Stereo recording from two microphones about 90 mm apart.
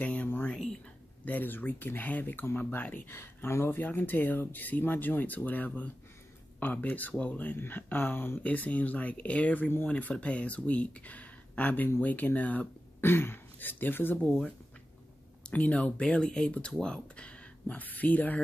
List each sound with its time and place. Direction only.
0.0 s a sound: 15° left (ahead or behind)
1.2 s speech: 20° left (ahead or behind)
15.5 s speech: 15° left (ahead or behind)